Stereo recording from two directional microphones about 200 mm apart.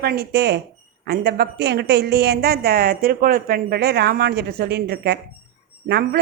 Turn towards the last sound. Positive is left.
turn(degrees=-55)  # may be behind; listen again after turning